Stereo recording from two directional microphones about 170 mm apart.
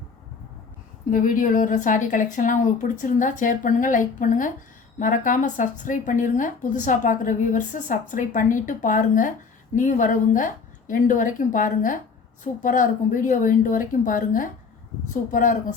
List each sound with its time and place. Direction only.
1.1 s a woman's voice: 50° left (ahead or behind)